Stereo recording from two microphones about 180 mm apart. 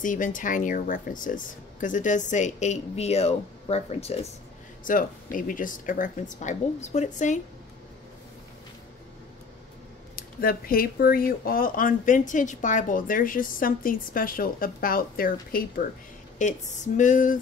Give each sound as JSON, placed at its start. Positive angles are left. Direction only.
{"t": 0.0, "sound": "speech", "side_deg": 45}
{"t": 4.8, "sound": "speech", "side_deg": 50}
{"t": 10.1, "sound": "speech", "side_deg": 55}